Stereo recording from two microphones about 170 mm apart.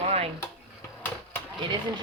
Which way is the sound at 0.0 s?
35° right (ahead or behind).